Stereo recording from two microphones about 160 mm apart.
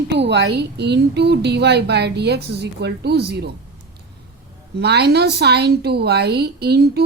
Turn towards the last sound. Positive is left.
turn(degrees=-90)